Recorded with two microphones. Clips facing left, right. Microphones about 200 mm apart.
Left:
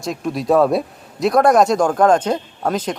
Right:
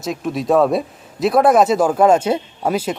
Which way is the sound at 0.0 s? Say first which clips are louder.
Right 1 dB; centre (ahead or behind).